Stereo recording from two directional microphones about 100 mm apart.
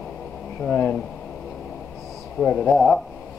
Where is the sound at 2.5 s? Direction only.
25° left (ahead or behind).